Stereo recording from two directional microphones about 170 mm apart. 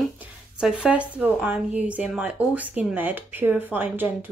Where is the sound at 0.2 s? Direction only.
5° right (ahead or behind).